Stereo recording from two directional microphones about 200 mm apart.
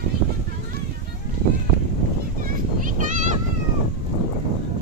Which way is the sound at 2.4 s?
40° right (ahead or behind).